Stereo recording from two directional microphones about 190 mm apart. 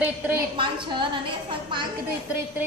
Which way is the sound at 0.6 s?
25° right (ahead or behind).